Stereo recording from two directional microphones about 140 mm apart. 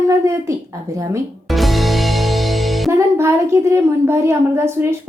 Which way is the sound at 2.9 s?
20° right (ahead or behind).